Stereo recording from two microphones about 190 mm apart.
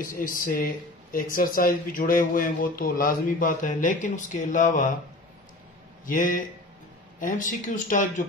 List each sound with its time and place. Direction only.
0.0 s speech: 45° left (ahead or behind)
6.0 s speech: 45° left (ahead or behind)